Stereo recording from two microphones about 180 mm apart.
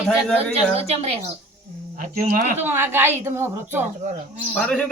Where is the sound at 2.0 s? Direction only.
50° right (ahead or behind).